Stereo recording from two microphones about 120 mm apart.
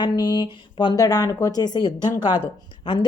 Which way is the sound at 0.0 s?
35° left (ahead or behind).